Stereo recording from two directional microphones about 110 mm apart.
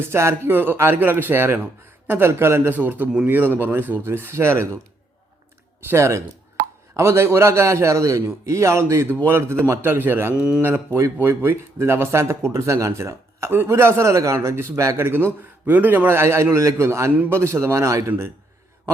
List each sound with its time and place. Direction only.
0.0 s a man's voice: 25° right (ahead or behind)
5.9 s speech: 25° right (ahead or behind)
10.3 s speech: 10° right (ahead or behind); by 18.1 s 30° right (ahead or behind)